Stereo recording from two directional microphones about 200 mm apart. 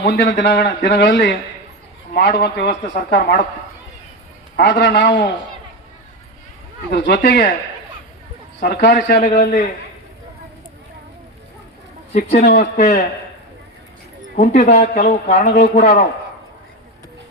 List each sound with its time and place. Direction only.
0.0 s a man's voice: 55° left (ahead or behind)
4.5 s a man's voice: 60° left (ahead or behind)
6.9 s a man's voice: 60° left (ahead or behind)
8.6 s a man's voice: 50° left (ahead or behind)
12.1 s speech: 35° left (ahead or behind)
14.3 s speech: 35° left (ahead or behind)